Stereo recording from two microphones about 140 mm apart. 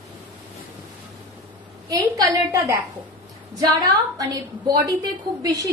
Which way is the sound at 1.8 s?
25° right (ahead or behind).